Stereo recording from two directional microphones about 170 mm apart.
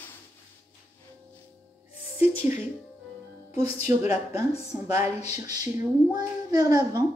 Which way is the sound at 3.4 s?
10° right (ahead or behind).